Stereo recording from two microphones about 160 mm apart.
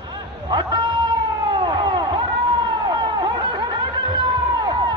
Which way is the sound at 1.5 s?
30° right (ahead or behind).